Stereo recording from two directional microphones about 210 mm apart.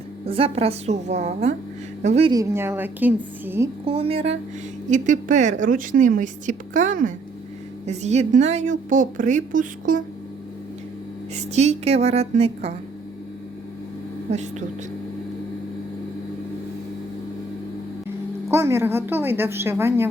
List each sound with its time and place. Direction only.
0.3 s a woman's voice: 25° right (ahead or behind)
2.3 s a woman's voice: 15° right (ahead or behind)
3.8 s a woman's voice: 25° right (ahead or behind)
11.5 s a woman's voice: 30° right (ahead or behind)
18.5 s a woman's voice: 15° right (ahead or behind)